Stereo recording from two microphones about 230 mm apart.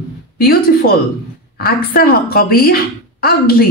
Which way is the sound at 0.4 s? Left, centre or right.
Left.